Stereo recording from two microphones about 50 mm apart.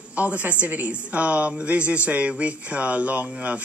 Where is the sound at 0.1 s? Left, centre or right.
Right.